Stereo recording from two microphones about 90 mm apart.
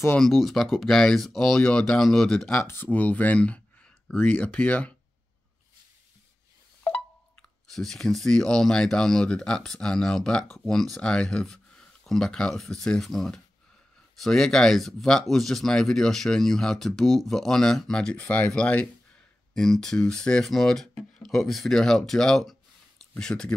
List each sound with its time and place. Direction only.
0.2 s speech: 5° left (ahead or behind)
2.6 s speech: 25° left (ahead or behind)
7.7 s speech: 5° left (ahead or behind)